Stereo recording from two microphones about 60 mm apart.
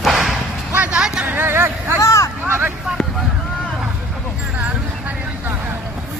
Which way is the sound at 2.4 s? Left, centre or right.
Right.